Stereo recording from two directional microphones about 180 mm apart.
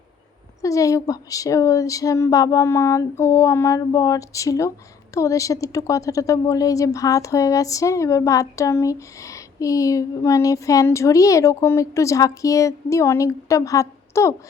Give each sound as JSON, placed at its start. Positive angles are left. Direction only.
{"t": 0.6, "sound": "a woman's voice", "side_deg": 20}